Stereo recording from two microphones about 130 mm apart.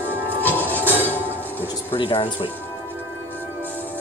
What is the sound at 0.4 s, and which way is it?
Music, 15° left (ahead or behind).